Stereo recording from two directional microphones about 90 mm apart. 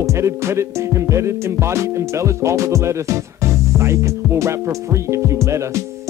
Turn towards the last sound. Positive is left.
turn(degrees=-35)  # may be behind; listen again after turning